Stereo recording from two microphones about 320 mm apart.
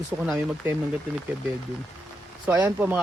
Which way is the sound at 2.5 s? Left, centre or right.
Centre.